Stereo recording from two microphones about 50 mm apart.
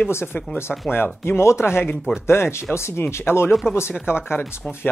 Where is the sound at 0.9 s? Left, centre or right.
Left.